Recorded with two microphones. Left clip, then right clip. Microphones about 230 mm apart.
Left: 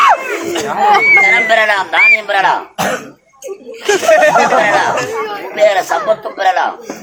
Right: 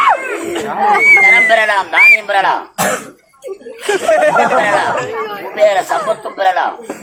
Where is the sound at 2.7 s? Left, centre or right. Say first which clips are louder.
Right 1 dB; centre.